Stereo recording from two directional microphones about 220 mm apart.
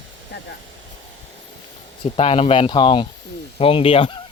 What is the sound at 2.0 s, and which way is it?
Speech, 25° left (ahead or behind).